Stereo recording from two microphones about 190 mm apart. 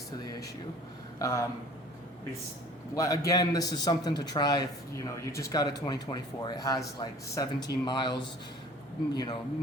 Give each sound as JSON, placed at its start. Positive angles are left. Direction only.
{"t": 0.2, "sound": "air conditioning", "side_deg": 20}
{"t": 1.2, "sound": "speech", "side_deg": 15}
{"t": 2.9, "sound": "a man's voice", "side_deg": 20}